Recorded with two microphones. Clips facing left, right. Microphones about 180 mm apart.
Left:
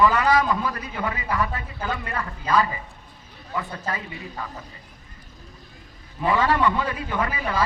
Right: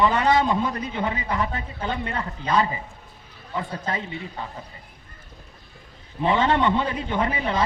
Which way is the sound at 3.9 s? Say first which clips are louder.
Right 2 dB; 25° right (ahead or behind).